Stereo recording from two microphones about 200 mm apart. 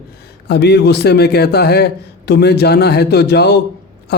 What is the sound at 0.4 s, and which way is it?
A man's voice, 55° left (ahead or behind).